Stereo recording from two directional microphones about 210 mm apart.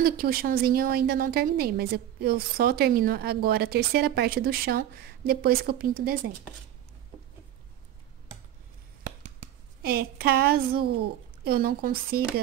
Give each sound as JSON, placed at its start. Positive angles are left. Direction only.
{"t": 0.0, "sound": "a woman's voice", "side_deg": -45}
{"t": 9.0, "sound": "a sound", "side_deg": -35}
{"t": 9.8, "sound": "a woman's voice", "side_deg": -45}